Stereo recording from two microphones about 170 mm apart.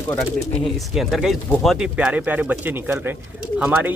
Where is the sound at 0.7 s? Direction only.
Centre (ahead or behind).